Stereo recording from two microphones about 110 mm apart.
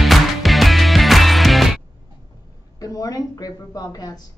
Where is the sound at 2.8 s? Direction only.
35° left (ahead or behind).